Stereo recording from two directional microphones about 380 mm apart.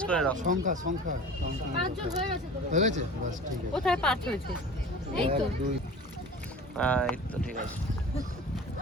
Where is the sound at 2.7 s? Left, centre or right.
Centre.